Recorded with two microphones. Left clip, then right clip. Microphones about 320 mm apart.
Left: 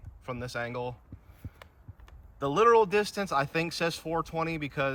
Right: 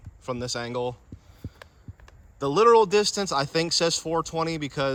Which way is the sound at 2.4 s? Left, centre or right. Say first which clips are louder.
Right 4 dB; centre.